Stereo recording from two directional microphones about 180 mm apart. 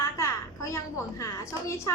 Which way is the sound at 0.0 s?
15° left (ahead or behind).